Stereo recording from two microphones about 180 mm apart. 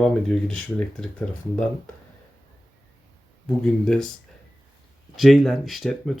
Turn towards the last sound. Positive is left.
turn(degrees=0)  # may be behind; listen again after turning